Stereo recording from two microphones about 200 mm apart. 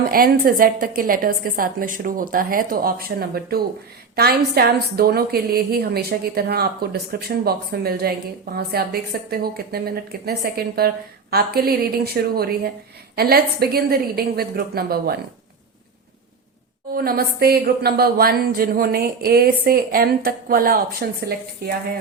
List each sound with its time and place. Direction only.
0.0 s speech: 45° right (ahead or behind)
16.9 s speech: 50° right (ahead or behind)